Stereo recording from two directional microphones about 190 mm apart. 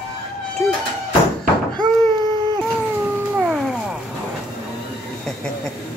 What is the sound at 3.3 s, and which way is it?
Cat, 5° right (ahead or behind).